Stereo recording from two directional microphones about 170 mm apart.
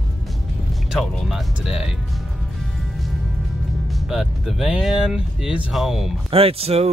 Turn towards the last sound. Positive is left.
turn(degrees=-35)  # may be behind; listen again after turning